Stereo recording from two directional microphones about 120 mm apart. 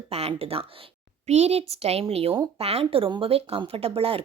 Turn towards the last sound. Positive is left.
turn(degrees=-50)  # may be behind; listen again after turning